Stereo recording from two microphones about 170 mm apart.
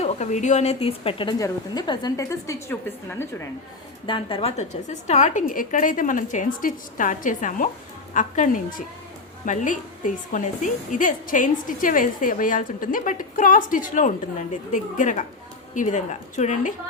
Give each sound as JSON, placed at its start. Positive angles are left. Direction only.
{"t": 0.0, "sound": "a woman's voice", "side_deg": 45}
{"t": 4.0, "sound": "a woman's voice", "side_deg": 30}